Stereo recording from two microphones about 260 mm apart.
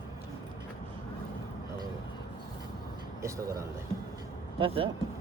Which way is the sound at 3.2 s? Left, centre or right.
Centre.